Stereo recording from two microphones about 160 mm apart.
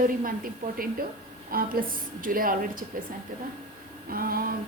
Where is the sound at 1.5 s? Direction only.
65° right (ahead or behind).